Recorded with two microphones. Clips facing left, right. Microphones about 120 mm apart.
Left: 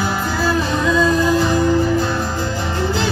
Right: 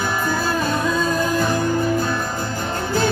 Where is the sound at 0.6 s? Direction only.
50° right (ahead or behind).